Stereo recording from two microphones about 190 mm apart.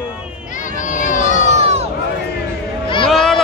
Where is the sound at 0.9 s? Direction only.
40° left (ahead or behind).